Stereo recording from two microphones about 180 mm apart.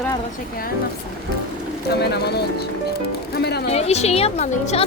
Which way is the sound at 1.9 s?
65° left (ahead or behind).